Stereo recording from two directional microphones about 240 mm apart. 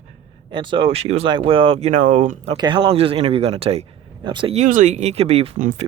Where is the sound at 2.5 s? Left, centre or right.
Centre.